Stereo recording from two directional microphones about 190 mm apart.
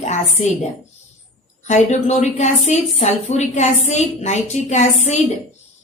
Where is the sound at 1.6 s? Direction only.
35° left (ahead or behind).